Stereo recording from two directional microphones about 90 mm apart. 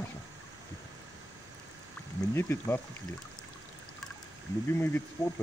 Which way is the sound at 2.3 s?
25° left (ahead or behind).